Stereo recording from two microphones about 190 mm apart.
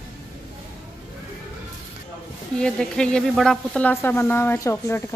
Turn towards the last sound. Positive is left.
turn(degrees=15)  # may be behind; listen again after turning